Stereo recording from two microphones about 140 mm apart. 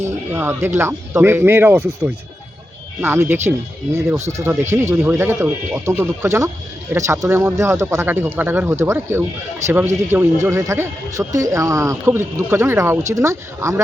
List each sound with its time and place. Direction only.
0.0 s speech: 15° right (ahead or behind)
4.7 s speech: 20° right (ahead or behind)